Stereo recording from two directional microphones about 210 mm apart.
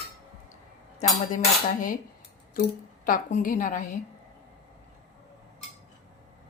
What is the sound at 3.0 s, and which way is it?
Speech, 40° left (ahead or behind).